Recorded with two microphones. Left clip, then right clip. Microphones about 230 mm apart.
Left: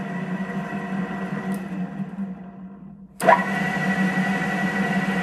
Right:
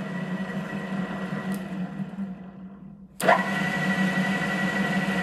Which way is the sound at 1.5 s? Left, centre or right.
Centre.